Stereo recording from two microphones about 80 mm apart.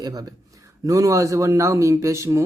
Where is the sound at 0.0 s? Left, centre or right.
Right.